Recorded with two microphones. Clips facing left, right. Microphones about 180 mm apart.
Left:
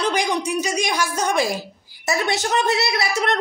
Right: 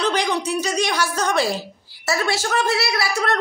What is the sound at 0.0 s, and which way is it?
A woman's voice, 10° left (ahead or behind).